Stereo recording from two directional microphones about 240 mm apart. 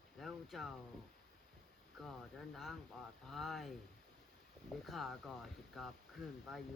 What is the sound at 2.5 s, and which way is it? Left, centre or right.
Speech, centre.